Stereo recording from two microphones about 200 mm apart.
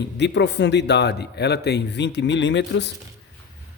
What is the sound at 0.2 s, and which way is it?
Speech, 60° left (ahead or behind).